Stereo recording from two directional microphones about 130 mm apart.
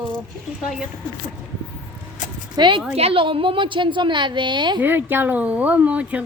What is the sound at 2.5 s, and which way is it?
A woman's voice, 35° right (ahead or behind).